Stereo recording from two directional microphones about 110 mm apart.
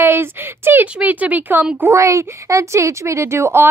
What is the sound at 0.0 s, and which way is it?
A woman's voice, 20° right (ahead or behind).